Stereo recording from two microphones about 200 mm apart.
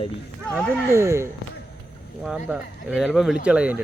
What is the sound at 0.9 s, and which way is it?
Speech, 15° right (ahead or behind).